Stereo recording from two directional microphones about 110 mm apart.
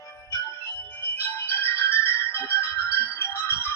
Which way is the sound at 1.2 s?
20° left (ahead or behind).